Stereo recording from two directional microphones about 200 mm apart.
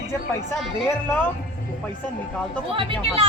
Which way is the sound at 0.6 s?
Centre (ahead or behind).